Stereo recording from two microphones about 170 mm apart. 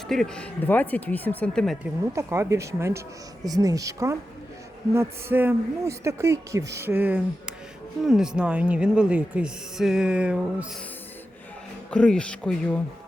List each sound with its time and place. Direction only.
0.1 s speech: 5° left (ahead or behind)
2.1 s a woman's voice: 15° right (ahead or behind)
11.9 s speech: 5° left (ahead or behind)